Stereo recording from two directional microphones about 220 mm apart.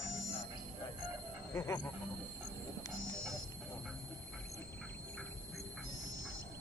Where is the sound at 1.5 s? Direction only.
10° left (ahead or behind).